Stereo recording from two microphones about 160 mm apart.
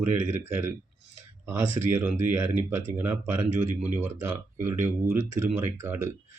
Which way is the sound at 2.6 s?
15° right (ahead or behind).